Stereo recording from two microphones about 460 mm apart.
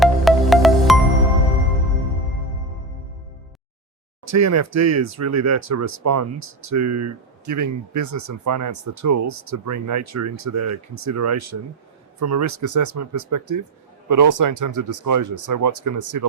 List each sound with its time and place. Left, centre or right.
0.0 s music: centre
4.3 s speech: right